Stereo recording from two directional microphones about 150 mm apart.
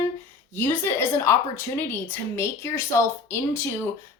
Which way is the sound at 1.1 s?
15° left (ahead or behind).